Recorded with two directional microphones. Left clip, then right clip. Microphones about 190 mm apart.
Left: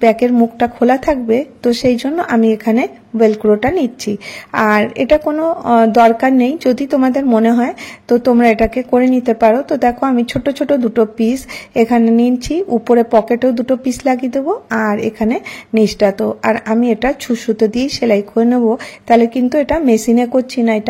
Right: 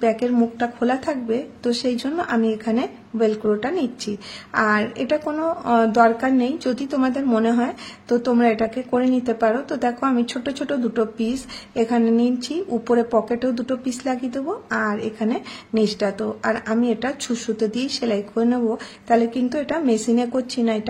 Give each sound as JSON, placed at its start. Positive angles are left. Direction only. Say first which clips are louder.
{"t": 0.0, "sound": "speech", "louder": "left 8 dB", "side_deg": 35}